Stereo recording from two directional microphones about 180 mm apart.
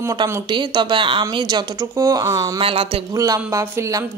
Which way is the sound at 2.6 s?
30° right (ahead or behind).